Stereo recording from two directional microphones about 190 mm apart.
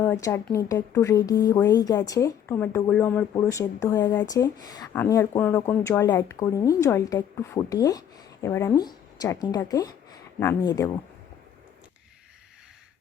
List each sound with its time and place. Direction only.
0.0 s speech: 15° left (ahead or behind)